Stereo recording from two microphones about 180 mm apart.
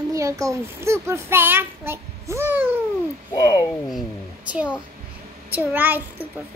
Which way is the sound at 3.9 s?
5° right (ahead or behind).